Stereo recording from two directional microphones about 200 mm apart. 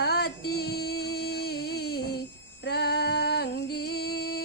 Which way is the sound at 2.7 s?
55° left (ahead or behind).